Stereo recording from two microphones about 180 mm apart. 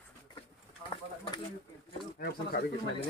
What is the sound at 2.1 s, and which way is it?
Pigeon, 55° left (ahead or behind).